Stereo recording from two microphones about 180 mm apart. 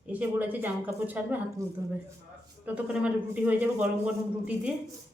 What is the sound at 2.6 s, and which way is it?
A man's voice, 5° right (ahead or behind).